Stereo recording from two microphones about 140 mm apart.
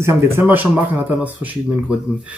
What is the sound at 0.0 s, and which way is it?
Speech, 15° right (ahead or behind).